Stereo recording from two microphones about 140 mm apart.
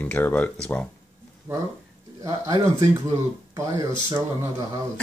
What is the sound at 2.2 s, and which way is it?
Speech, 25° right (ahead or behind).